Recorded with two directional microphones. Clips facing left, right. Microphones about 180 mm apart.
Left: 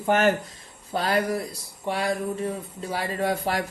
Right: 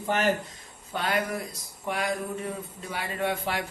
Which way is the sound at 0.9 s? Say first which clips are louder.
Left 4 dB; 35° left (ahead or behind).